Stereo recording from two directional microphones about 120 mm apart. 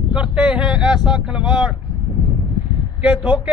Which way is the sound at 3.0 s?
5° right (ahead or behind).